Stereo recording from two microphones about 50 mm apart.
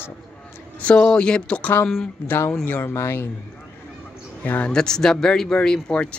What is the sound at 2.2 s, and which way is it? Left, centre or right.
Speech, left.